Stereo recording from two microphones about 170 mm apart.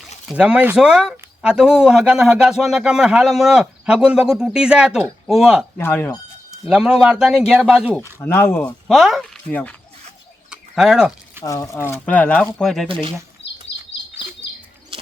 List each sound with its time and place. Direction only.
0.3 s speech: 5° right (ahead or behind)
5.7 s speech: 15° left (ahead or behind)
6.7 s speech: 5° right (ahead or behind)
8.2 s speech: 15° left (ahead or behind)
8.9 s speech: centre (ahead or behind)
10.5 s a sound: 5° right (ahead or behind)
11.4 s speech: 20° left (ahead or behind); by 12.9 s centre (ahead or behind)
12.9 s speech: 35° right (ahead or behind)
13.4 s a sound: 90° left